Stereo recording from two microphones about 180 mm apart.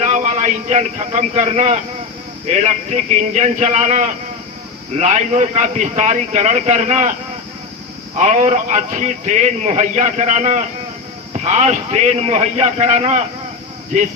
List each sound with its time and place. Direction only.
0.0 s a man's voice: 40° right (ahead or behind)